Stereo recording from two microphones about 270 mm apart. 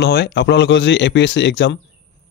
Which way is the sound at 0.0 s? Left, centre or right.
Left.